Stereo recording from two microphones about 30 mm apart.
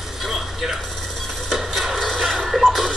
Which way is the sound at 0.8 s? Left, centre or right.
Centre.